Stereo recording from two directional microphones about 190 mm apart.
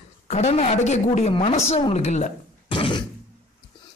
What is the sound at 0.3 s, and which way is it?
A man's voice, 35° left (ahead or behind).